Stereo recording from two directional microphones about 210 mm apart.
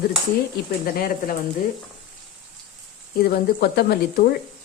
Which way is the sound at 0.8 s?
40° left (ahead or behind).